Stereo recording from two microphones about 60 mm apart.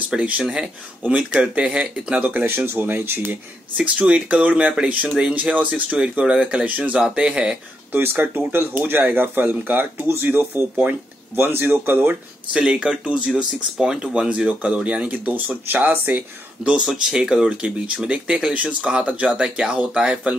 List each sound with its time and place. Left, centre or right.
0.1 s speech: right
0.4 s speech: centre
2.4 s speech: right
3.8 s speech: right
7.9 s speech: right
12.5 s speech: centre
15.0 s speech: right
16.6 s speech: centre